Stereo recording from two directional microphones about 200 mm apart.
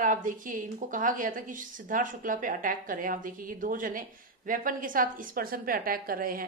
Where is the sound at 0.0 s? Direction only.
40° right (ahead or behind).